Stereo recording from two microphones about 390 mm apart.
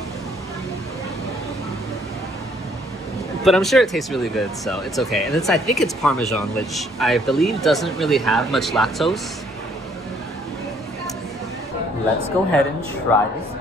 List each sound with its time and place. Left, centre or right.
3.4 s speech: centre
12.4 s speech: centre